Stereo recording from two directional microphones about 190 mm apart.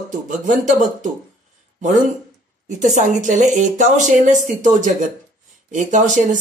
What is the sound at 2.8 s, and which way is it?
Speech, 40° right (ahead or behind).